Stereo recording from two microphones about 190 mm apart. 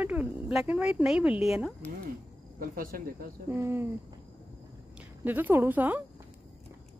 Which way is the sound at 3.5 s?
10° right (ahead or behind).